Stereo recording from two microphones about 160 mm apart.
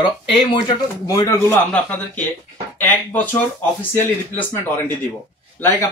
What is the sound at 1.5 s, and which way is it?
Speech, 10° left (ahead or behind).